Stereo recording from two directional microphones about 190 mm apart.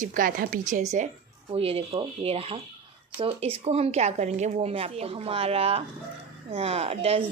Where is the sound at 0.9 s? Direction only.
35° right (ahead or behind).